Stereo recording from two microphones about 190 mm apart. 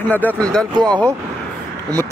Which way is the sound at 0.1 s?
10° left (ahead or behind).